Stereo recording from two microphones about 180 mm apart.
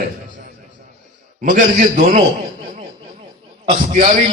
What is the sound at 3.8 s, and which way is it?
Speech, 40° right (ahead or behind).